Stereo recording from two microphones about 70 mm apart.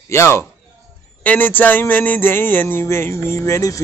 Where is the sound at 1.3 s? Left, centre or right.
Left.